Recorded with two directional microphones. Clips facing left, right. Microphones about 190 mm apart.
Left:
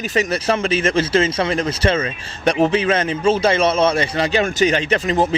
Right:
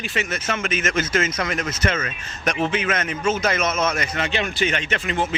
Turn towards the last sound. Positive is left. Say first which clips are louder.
# left 7 dB
turn(degrees=35)  # may be behind; listen again after turning